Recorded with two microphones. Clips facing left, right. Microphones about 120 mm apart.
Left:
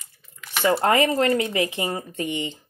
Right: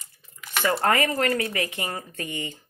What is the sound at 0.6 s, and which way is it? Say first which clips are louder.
Speech: left 3 dB; 25° left (ahead or behind).